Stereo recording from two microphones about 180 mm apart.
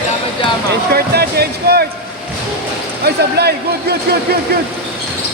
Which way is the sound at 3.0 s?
65° right (ahead or behind).